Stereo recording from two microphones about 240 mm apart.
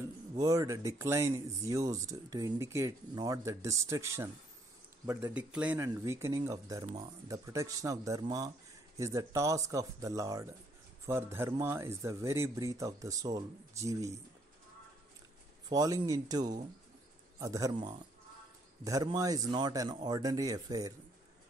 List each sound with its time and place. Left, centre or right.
0.4 s speech: centre
15.7 s speech: centre